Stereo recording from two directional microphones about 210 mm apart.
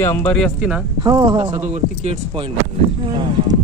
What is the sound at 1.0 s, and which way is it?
Speech, 20° right (ahead or behind).